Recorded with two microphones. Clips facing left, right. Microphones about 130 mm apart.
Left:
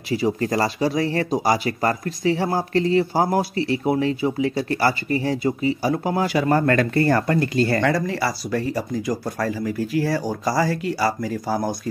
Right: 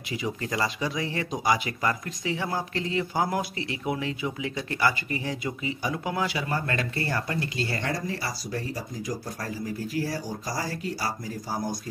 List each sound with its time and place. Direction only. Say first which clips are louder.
0.1 s speech: left 9 dB; 40° left (ahead or behind)
7.8 s speech: left 9 dB; 80° left